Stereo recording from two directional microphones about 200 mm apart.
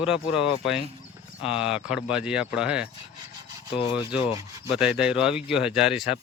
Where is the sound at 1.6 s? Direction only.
5° right (ahead or behind).